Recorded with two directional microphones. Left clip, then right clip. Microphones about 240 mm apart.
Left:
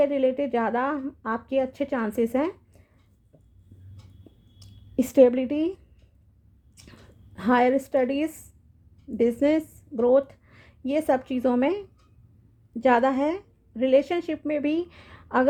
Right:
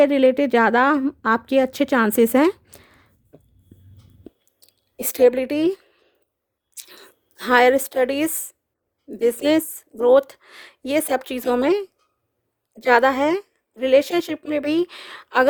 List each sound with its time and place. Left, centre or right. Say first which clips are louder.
0.0 s a woman's voice: right 7 dB; right
4.9 s a woman's voice: right 2 dB; right